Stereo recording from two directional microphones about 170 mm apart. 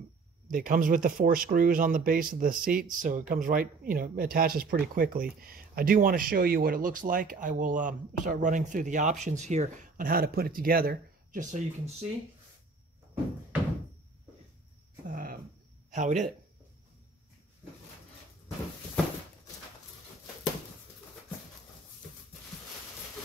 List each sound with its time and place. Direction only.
0.5 s speech: 55° right (ahead or behind)
15.0 s cricket: 55° right (ahead or behind)
15.9 s speech: 45° right (ahead or behind)